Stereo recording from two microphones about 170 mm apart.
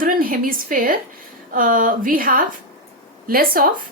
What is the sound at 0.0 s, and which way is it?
A woman's voice, 55° right (ahead or behind).